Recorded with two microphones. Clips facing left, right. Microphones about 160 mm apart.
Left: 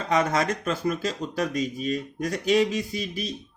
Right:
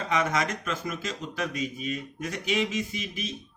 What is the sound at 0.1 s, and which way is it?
Speech, 35° left (ahead or behind).